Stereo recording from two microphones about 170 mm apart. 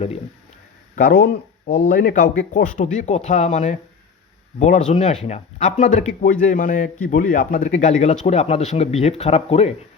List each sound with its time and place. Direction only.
0.9 s speech: 65° left (ahead or behind); by 9.7 s 35° left (ahead or behind)